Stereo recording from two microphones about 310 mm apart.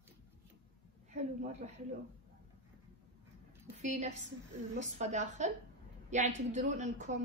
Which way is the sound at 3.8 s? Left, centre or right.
Right.